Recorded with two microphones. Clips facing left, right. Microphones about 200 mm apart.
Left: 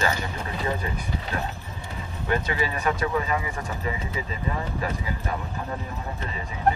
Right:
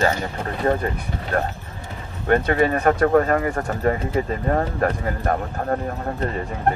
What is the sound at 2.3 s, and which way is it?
Speech, 60° right (ahead or behind).